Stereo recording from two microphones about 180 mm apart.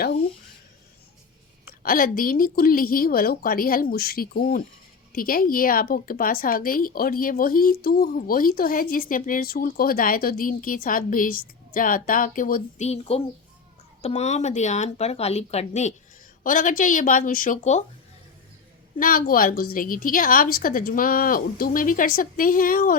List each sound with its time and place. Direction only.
1.8 s a woman's voice: 50° left (ahead or behind)
12.8 s a woman's voice: 35° left (ahead or behind)
18.9 s a woman's voice: 50° left (ahead or behind)